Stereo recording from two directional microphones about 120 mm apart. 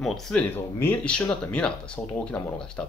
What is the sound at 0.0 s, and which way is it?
Speech, 5° left (ahead or behind).